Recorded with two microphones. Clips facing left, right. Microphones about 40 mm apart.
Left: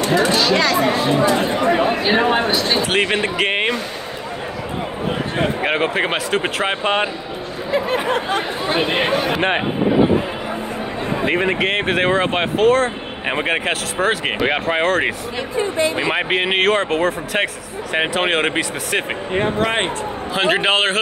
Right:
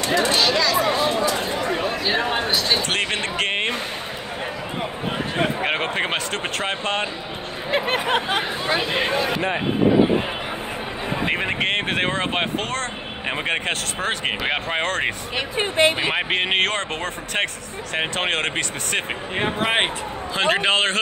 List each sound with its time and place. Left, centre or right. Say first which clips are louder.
0.2 s speech: left 3 dB; centre
0.6 s speech: left 3 dB; left
0.9 s speech: left 5 dB; centre
2.4 s speech: left 3 dB; centre
5.6 s speech: left 4 dB; centre
6.4 s speech: left 5 dB; centre
8.6 s speech: left 5 dB; centre
11.2 s speech: left 5 dB; centre
15.3 s speech: right 1 dB; right
16.1 s speech: left 3 dB; centre
19.4 s speech: left 2 dB; centre
20.3 s speech: left 3 dB; centre